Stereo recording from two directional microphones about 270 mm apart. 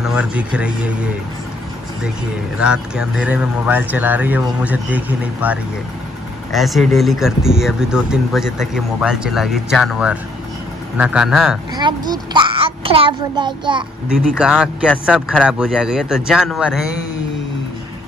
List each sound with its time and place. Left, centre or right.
0.0 s speech: centre
2.5 s speech: centre
11.7 s a child's voice: centre
14.0 s speech: centre